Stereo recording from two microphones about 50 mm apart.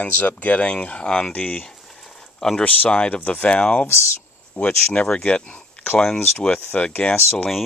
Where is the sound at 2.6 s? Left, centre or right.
Left.